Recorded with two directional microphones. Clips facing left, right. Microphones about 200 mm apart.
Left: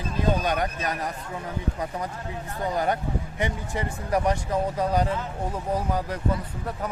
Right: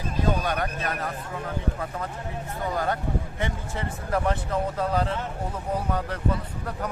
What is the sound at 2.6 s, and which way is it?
Speech, 20° left (ahead or behind).